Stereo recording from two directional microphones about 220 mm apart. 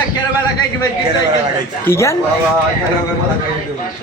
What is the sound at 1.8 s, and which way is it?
Speech, 10° left (ahead or behind).